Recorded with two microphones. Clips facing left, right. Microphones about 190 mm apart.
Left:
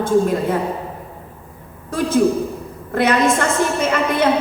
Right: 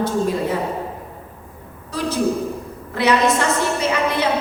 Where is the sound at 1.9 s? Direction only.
50° left (ahead or behind).